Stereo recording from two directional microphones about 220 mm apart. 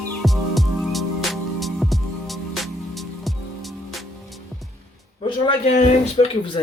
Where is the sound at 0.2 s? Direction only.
Centre (ahead or behind).